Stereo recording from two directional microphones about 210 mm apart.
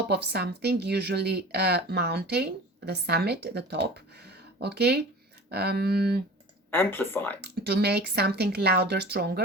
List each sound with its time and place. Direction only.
0.1 s speech: 50° right (ahead or behind)
6.7 s speech: 10° left (ahead or behind)
7.4 s speech: 50° right (ahead or behind)